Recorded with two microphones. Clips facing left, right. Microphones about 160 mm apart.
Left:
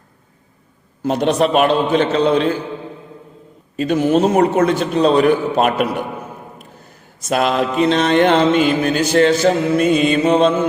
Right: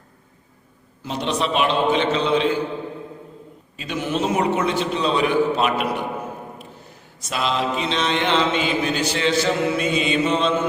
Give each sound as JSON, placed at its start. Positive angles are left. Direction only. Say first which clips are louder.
{"t": 1.0, "sound": "mantra", "louder": "left 8 dB", "side_deg": 50}
{"t": 3.8, "sound": "mantra", "louder": "left 10 dB", "side_deg": 45}
{"t": 7.2, "sound": "mantra", "louder": "left 7 dB", "side_deg": 50}